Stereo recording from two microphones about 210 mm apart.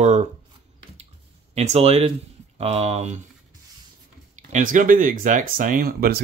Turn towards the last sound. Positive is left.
turn(degrees=-45)  # may be behind; listen again after turning